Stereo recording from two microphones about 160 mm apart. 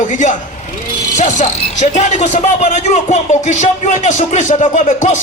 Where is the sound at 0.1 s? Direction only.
50° left (ahead or behind).